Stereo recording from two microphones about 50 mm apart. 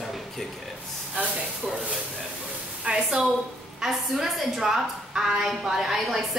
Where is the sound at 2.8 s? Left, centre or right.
Centre.